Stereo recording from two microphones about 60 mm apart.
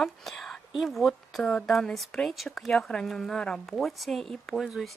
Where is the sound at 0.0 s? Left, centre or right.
Centre.